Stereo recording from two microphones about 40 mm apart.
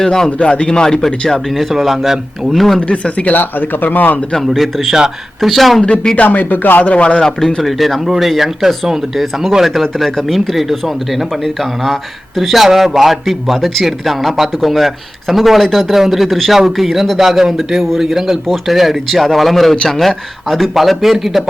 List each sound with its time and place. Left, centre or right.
0.0 s speech: centre
0.3 s speech: left
1.5 s a man's voice: centre
2.9 s speech: left
3.9 s speech: left
4.4 s a man's voice: centre
6.2 s speech: left
6.8 s speech: left
7.6 s a man's voice: centre
12.4 s a man's voice: centre